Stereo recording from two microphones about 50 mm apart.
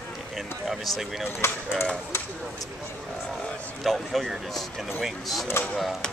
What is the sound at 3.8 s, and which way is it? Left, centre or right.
Speech, centre.